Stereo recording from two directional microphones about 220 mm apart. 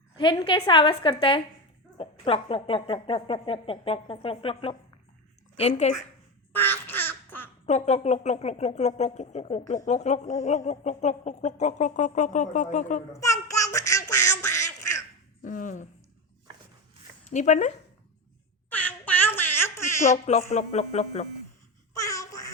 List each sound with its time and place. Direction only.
0.2 s a woman's voice: 20° left (ahead or behind)
6.5 s bird: 10° left (ahead or behind)
7.7 s speech: 30° left (ahead or behind)
13.5 s a sound: 15° left (ahead or behind)
15.4 s speech: 35° left (ahead or behind)
17.2 s speech: 35° left (ahead or behind)
18.7 s a sound: 5° left (ahead or behind)
20.0 s speech: 30° left (ahead or behind)
21.9 s babbling: 15° left (ahead or behind)